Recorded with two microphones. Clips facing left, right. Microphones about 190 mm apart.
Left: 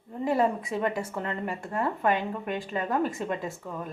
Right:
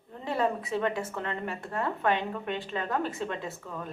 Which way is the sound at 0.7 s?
10° left (ahead or behind).